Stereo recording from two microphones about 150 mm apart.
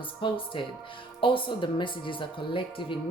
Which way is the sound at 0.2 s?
35° left (ahead or behind).